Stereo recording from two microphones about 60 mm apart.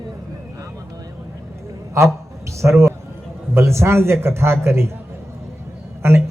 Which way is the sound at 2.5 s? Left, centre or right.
Right.